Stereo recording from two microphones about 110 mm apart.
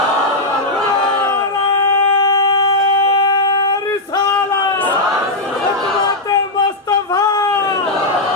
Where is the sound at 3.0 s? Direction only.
40° left (ahead or behind).